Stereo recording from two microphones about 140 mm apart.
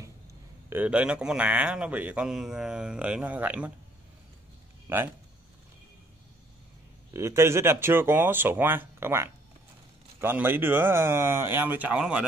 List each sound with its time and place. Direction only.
0.7 s a man's voice: 10° right (ahead or behind)
4.8 s speech: 15° right (ahead or behind)
7.2 s a man's voice: 20° right (ahead or behind)